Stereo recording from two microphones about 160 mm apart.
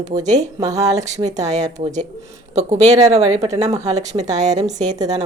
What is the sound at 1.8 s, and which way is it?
Speech, 50° right (ahead or behind).